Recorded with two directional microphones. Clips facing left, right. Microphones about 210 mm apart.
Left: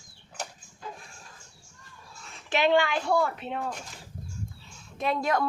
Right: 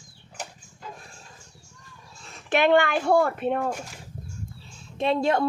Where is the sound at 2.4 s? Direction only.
55° right (ahead or behind).